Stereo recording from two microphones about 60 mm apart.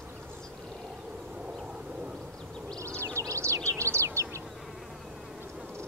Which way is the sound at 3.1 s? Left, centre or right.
Right.